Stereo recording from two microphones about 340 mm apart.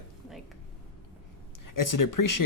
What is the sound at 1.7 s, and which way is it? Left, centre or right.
Speech, left.